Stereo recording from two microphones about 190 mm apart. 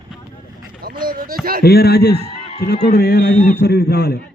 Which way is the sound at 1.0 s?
50° right (ahead or behind).